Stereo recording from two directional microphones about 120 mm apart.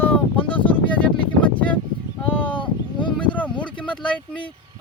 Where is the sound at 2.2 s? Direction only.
15° left (ahead or behind).